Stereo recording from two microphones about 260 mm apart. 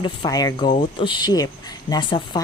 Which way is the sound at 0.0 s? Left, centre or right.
Centre.